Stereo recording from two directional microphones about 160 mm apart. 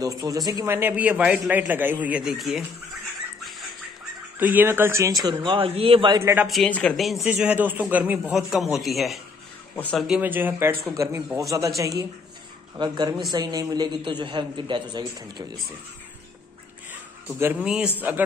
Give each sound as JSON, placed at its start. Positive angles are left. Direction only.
{"t": 0.0, "sound": "a man's voice", "side_deg": -20}
{"t": 4.4, "sound": "a man's voice", "side_deg": -10}
{"t": 6.1, "sound": "a man's voice", "side_deg": -15}
{"t": 6.4, "sound": "speech", "side_deg": 0}
{"t": 7.2, "sound": "a man's voice", "side_deg": -10}
{"t": 10.0, "sound": "a man's voice", "side_deg": -10}
{"t": 16.9, "sound": "a sound", "side_deg": -10}
{"t": 17.6, "sound": "speech", "side_deg": -5}